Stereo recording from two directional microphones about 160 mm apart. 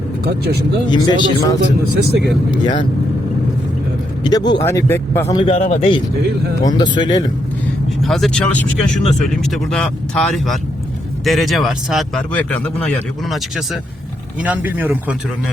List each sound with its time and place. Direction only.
0.3 s speech: 80° right
0.9 s speech: 25° left (ahead or behind)
1.6 s a man's voice: 90° right
2.5 s speech: 30° left (ahead or behind)
4.2 s speech: 25° left (ahead or behind)
5.5 s speech: 45° left (ahead or behind)
6.6 s speech: 25° left (ahead or behind)
8.0 s speech: centre (ahead or behind)
12.3 s speech: 10° left (ahead or behind)
14.4 s speech: 10° right (ahead or behind)